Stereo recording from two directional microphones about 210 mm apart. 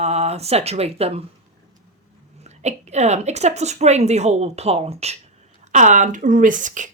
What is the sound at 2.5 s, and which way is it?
A woman's voice, 30° right (ahead or behind).